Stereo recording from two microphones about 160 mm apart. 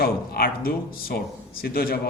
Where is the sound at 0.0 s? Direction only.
75° left (ahead or behind).